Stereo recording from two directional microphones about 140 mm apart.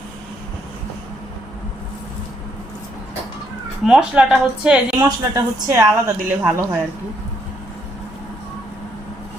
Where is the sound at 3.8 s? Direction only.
5° right (ahead or behind).